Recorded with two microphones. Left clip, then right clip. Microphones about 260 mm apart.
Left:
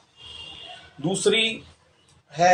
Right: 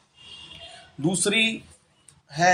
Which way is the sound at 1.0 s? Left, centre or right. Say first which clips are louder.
Left 1 dB; right.